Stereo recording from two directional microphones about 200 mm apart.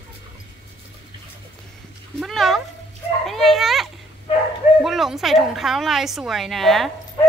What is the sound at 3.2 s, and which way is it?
Dog, centre (ahead or behind).